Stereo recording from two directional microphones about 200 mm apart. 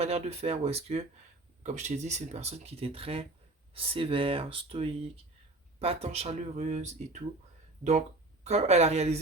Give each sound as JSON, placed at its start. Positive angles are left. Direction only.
{"t": 0.0, "sound": "speech", "side_deg": -30}
{"t": 8.4, "sound": "speech", "side_deg": -35}